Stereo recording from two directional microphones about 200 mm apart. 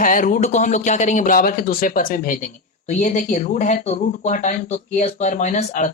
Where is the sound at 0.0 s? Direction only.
40° left (ahead or behind).